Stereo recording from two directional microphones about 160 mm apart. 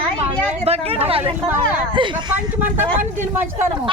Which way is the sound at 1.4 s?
15° right (ahead or behind).